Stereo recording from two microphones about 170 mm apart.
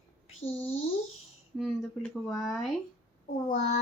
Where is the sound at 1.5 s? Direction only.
Centre (ahead or behind).